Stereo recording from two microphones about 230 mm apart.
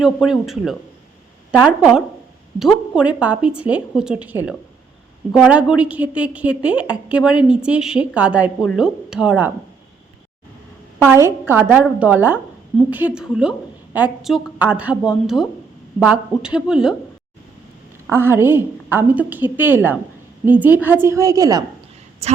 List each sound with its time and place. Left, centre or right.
0.0 s a woman's voice: centre
11.0 s a woman's voice: centre
18.1 s a woman's voice: centre
22.2 s a woman's voice: right